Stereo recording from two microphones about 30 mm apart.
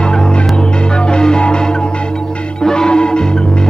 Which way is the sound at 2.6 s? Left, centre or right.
Left.